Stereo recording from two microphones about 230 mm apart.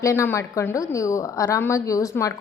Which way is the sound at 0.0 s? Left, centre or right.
Centre.